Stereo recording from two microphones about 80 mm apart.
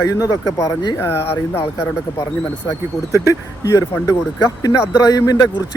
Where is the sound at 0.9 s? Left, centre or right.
Left.